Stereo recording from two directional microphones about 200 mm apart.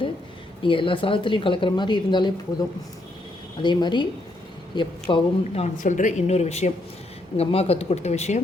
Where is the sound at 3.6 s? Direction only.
20° left (ahead or behind).